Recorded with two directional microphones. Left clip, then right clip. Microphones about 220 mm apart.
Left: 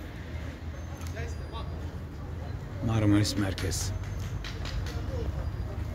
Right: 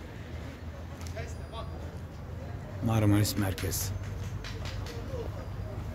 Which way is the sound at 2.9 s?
15° right (ahead or behind).